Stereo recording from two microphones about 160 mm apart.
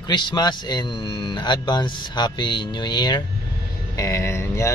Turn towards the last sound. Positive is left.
turn(degrees=15)  # may be behind; listen again after turning